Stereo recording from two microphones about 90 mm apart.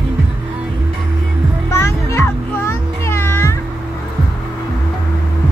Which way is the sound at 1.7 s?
30° left (ahead or behind).